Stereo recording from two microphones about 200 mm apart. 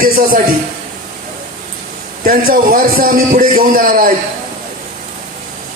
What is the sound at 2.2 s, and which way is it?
A man's voice, 45° right (ahead or behind).